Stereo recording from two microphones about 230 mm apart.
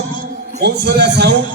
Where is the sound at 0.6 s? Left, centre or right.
Right.